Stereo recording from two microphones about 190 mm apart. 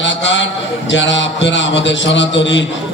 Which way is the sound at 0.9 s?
75° left (ahead or behind).